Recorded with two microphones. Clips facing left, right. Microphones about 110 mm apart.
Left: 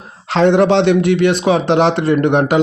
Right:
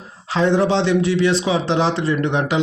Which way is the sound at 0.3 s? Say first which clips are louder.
Left 5 dB; 70° left (ahead or behind).